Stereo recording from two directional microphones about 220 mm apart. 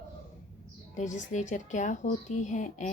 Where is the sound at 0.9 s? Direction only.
35° left (ahead or behind).